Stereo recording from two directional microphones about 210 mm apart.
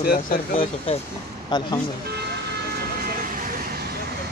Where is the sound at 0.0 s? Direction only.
45° left (ahead or behind).